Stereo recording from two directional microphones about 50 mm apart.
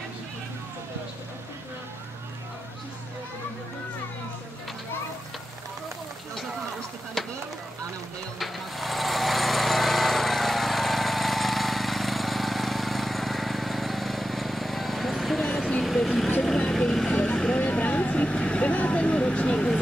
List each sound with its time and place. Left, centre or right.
7.2 s chop: centre
8.4 s jackhammer: centre
15.8 s vehicle: centre